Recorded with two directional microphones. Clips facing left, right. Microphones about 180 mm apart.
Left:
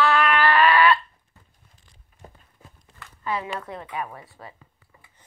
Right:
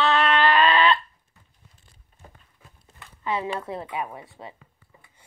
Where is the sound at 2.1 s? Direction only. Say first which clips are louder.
Left 3 dB; 30° right (ahead or behind).